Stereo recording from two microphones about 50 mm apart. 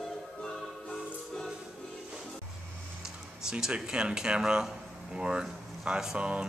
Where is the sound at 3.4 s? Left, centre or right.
Centre.